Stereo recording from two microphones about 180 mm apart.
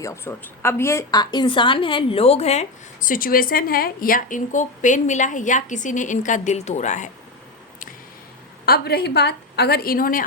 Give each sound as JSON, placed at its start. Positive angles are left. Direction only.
{"t": 0.0, "sound": "a woman's voice", "side_deg": 15}
{"t": 8.6, "sound": "a woman's voice", "side_deg": 60}